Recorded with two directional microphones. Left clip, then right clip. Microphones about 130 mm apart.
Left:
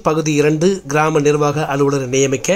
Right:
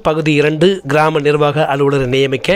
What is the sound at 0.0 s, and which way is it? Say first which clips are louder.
A man's voice: right 2 dB; 25° right (ahead or behind).